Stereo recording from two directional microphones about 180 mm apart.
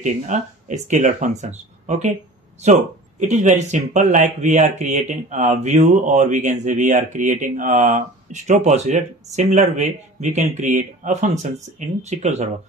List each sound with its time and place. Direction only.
0.0 s speech: 40° right (ahead or behind)